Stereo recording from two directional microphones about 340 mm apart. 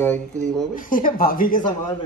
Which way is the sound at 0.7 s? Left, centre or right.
Left.